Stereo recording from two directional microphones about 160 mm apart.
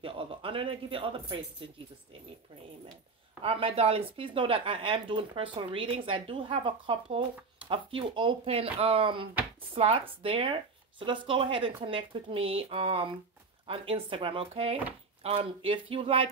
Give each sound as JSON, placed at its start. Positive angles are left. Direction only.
{"t": 0.0, "sound": "speech", "side_deg": -35}
{"t": 3.4, "sound": "speech", "side_deg": -35}